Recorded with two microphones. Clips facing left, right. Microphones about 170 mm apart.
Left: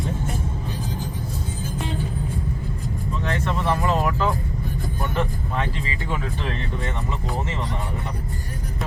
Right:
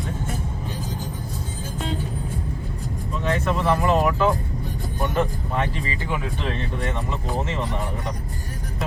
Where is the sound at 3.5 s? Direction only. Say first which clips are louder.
Right 3 dB; 15° right (ahead or behind).